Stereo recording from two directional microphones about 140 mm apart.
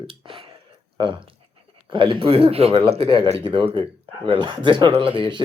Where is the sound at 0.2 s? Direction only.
40° right (ahead or behind).